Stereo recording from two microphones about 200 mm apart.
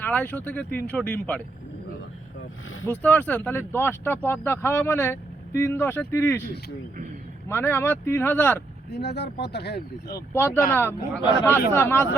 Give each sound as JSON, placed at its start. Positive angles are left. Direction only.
{"t": 0.0, "sound": "speech", "side_deg": 10}
{"t": 2.8, "sound": "speech", "side_deg": 5}
{"t": 7.4, "sound": "speech", "side_deg": 10}
{"t": 8.9, "sound": "speech", "side_deg": 55}
{"t": 10.3, "sound": "speech", "side_deg": 10}